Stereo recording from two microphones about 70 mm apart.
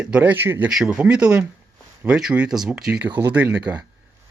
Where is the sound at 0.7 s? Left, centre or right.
Centre.